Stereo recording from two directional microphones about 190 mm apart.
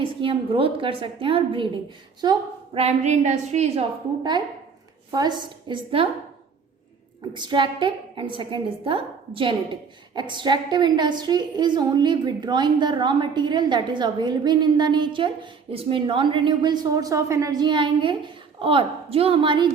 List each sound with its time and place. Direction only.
0.0 s a woman's voice: 25° right (ahead or behind)
2.7 s a woman's voice: 35° right (ahead or behind)
4.2 s a woman's voice: 25° right (ahead or behind)
7.3 s a woman's voice: 25° right (ahead or behind)